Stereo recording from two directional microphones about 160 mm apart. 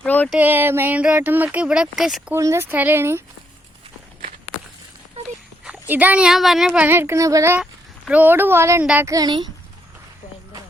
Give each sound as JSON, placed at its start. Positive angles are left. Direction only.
{"t": 0.0, "sound": "a sound", "side_deg": 10}
{"t": 0.3, "sound": "speech", "side_deg": -10}
{"t": 2.3, "sound": "speech", "side_deg": -15}
{"t": 5.9, "sound": "speech", "side_deg": -10}
{"t": 7.6, "sound": "speech", "side_deg": -5}